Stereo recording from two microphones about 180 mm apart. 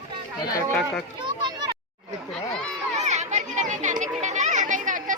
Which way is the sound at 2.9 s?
40° right (ahead or behind).